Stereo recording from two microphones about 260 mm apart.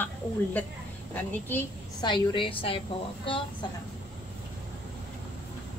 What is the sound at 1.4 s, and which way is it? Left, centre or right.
A woman's voice, centre.